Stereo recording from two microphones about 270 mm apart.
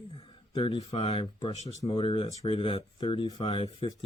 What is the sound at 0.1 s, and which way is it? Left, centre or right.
Speech, centre.